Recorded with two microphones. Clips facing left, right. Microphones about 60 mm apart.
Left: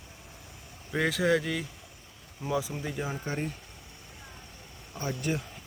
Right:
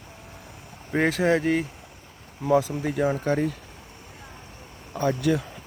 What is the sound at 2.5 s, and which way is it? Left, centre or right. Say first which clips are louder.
Speech: right 9 dB; right.